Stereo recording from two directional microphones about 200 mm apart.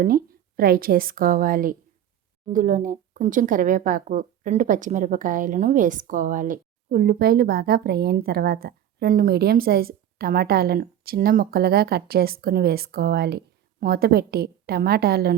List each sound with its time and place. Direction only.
0.0 s speech: 45° right (ahead or behind)